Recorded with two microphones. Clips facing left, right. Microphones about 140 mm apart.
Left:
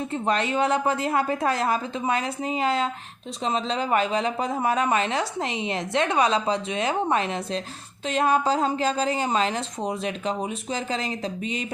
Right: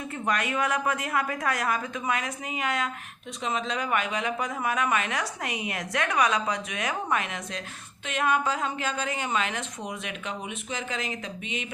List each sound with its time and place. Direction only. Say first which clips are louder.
0.0 s a woman's voice: left 4 dB; 30° left (ahead or behind)